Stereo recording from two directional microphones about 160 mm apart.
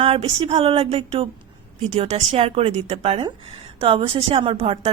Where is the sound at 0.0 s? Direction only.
35° right (ahead or behind).